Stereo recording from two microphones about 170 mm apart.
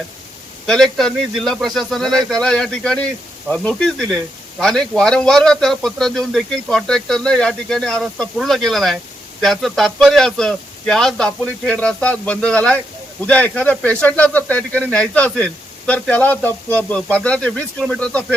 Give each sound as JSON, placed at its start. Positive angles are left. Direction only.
{"t": 0.7, "sound": "a man's voice", "side_deg": 5}